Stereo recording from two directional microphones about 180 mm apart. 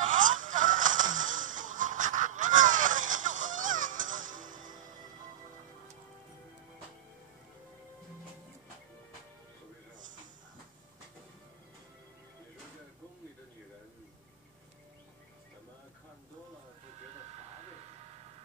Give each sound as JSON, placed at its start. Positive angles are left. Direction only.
{"t": 0.1, "sound": "music", "side_deg": -45}